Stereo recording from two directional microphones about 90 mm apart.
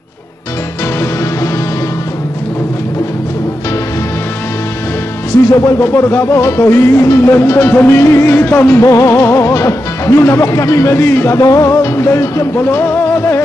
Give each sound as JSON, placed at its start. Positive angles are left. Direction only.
{"t": 5.5, "sound": "music", "side_deg": 35}
{"t": 8.8, "sound": "speech", "side_deg": 35}
{"t": 11.3, "sound": "speech", "side_deg": 40}
{"t": 12.5, "sound": "music", "side_deg": 25}